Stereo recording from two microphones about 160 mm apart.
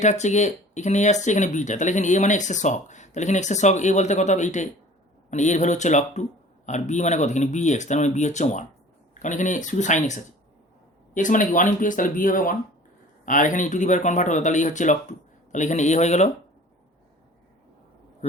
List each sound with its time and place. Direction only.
0.0 s speech: 45° left (ahead or behind)